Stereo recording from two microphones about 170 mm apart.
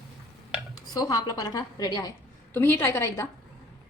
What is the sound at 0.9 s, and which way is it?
A woman's voice, 20° left (ahead or behind).